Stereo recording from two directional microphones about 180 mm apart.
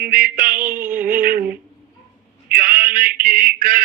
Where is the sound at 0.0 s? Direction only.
50° right (ahead or behind).